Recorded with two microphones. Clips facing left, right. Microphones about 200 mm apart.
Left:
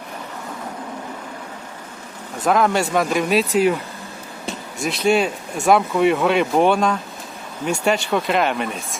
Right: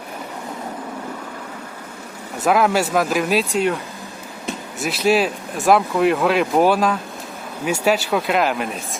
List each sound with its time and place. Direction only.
2.4 s speech: 5° right (ahead or behind)
4.8 s speech: 5° right (ahead or behind)